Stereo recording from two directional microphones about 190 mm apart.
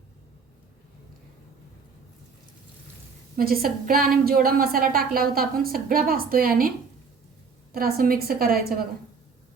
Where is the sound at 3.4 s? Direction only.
50° right (ahead or behind).